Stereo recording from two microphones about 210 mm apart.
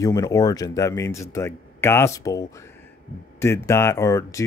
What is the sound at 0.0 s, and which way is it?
Speech, 15° left (ahead or behind).